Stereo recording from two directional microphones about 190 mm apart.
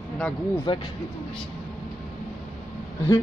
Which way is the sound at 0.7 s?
25° left (ahead or behind).